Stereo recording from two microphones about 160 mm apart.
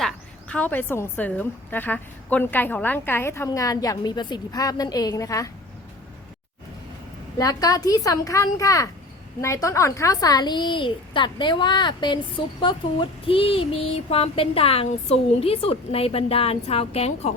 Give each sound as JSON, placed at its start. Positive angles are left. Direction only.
{"t": 0.0, "sound": "a woman's voice", "side_deg": 5}
{"t": 7.3, "sound": "a woman's voice", "side_deg": 20}
{"t": 12.6, "sound": "a sound", "side_deg": 30}